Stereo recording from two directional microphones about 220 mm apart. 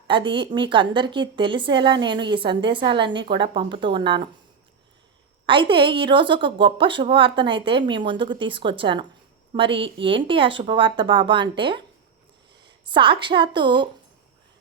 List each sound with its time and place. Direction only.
0.1 s a woman's voice: 20° right (ahead or behind)
5.5 s a woman's voice: 25° right (ahead or behind)
12.9 s a woman's voice: 20° right (ahead or behind)